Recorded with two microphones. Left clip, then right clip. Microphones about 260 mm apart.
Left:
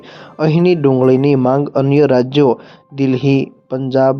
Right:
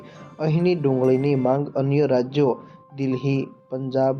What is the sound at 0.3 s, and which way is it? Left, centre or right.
Speech, left.